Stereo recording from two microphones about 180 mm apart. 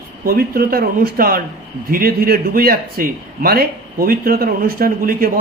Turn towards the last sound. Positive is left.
turn(degrees=-50)  # may be behind; listen again after turning